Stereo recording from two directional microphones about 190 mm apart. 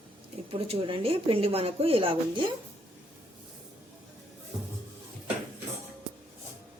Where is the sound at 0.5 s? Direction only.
30° right (ahead or behind).